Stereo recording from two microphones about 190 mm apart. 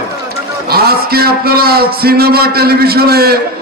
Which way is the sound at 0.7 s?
55° right (ahead or behind).